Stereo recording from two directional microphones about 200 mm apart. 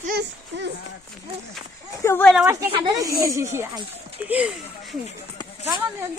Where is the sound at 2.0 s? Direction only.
10° left (ahead or behind).